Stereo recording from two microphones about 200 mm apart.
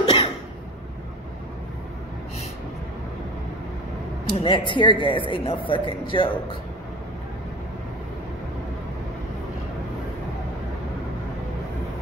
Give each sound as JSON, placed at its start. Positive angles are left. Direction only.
{"t": 0.0, "sound": "cough", "side_deg": 30}
{"t": 4.4, "sound": "speech", "side_deg": 25}